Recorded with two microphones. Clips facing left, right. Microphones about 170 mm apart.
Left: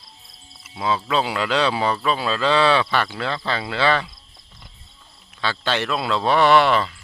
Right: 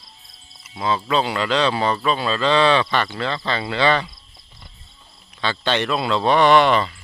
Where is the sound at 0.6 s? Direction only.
5° left (ahead or behind).